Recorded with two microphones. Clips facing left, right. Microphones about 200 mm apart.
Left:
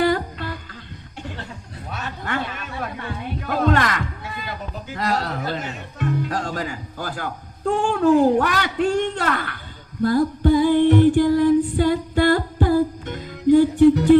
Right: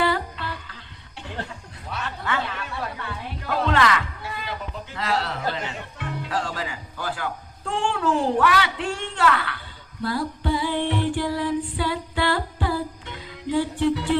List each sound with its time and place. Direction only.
0.0 s music: 45° left (ahead or behind)
1.9 s a sound: 45° left (ahead or behind)
2.8 s heart sounds: 45° left (ahead or behind)
4.9 s speech: 45° left (ahead or behind)
10.0 s female singing: 45° left (ahead or behind)